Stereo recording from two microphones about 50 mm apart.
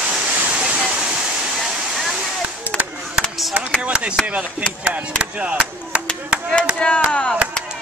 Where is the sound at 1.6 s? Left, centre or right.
Centre.